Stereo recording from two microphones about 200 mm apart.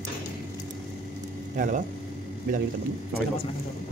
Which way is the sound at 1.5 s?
40° right (ahead or behind).